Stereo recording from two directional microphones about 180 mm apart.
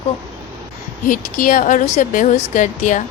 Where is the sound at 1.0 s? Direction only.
50° left (ahead or behind).